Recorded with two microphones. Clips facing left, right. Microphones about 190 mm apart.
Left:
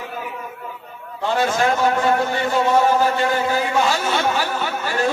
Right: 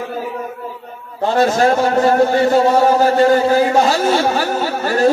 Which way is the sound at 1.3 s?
40° right (ahead or behind).